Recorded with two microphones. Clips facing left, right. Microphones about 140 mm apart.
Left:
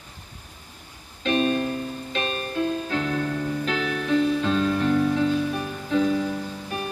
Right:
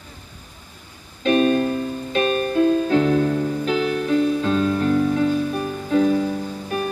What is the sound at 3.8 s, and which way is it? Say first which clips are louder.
Music: right 2 dB; 5° right (ahead or behind).